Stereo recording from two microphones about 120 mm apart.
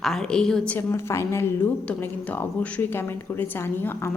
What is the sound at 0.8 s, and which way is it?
A woman's voice, 20° left (ahead or behind).